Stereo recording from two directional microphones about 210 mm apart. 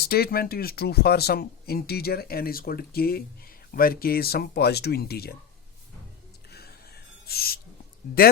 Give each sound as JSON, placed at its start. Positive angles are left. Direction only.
{"t": 0.0, "sound": "speech", "side_deg": 45}
{"t": 6.5, "sound": "owl", "side_deg": 50}